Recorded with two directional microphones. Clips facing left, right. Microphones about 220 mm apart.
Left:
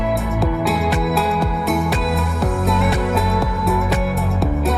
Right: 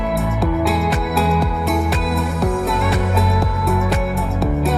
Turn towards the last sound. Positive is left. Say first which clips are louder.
# right 1 dB
turn(degrees=0)  # may be behind; listen again after turning